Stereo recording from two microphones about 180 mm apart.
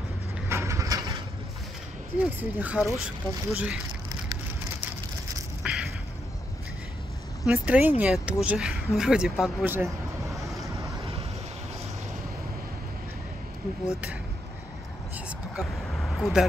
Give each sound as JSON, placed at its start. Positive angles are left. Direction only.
{"t": 0.5, "sound": "vehicle", "side_deg": -15}
{"t": 2.1, "sound": "speech", "side_deg": -10}
{"t": 5.6, "sound": "a sound", "side_deg": -5}
{"t": 7.4, "sound": "speech", "side_deg": -10}
{"t": 9.7, "sound": "vehicle", "side_deg": -15}
{"t": 15.1, "sound": "vehicle", "side_deg": -5}